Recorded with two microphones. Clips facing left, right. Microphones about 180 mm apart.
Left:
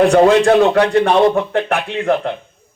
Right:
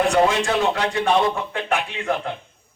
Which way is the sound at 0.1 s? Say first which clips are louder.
Left 9 dB; 60° left (ahead or behind).